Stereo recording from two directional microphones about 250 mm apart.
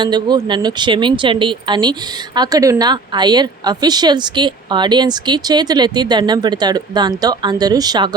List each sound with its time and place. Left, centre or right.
0.0 s speech: centre